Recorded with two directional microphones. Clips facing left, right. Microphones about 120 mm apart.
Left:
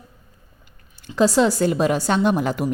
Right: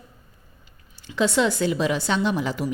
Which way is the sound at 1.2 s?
35° left (ahead or behind).